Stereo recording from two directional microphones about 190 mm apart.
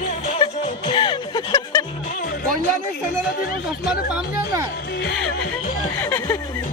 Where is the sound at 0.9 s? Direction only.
25° left (ahead or behind).